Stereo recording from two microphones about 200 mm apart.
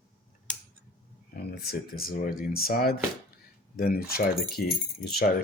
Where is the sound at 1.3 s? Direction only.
50° left (ahead or behind).